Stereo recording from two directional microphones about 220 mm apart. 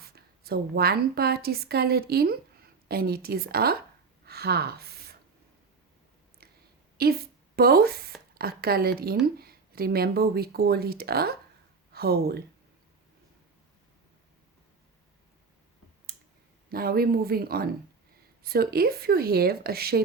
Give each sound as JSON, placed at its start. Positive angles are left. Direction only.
{"t": 0.0, "sound": "a woman's voice", "side_deg": -45}
{"t": 6.9, "sound": "a woman's voice", "side_deg": -45}
{"t": 16.6, "sound": "speech", "side_deg": -45}